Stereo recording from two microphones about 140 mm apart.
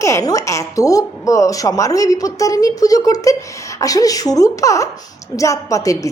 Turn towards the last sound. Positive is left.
turn(degrees=25)  # may be behind; listen again after turning